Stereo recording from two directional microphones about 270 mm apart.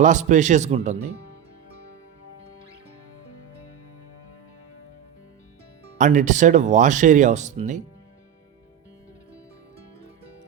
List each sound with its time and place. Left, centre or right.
0.0 s speech: right
6.0 s speech: right